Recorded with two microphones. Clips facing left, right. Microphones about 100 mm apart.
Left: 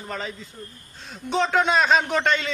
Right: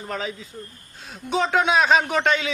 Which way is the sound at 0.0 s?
Centre (ahead or behind).